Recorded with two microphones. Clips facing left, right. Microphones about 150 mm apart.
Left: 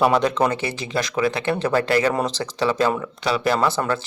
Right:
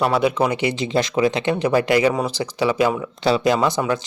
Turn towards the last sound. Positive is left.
turn(degrees=-15)  # may be behind; listen again after turning